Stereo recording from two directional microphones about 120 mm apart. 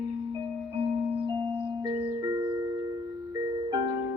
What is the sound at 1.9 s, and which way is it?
Music, 30° right (ahead or behind).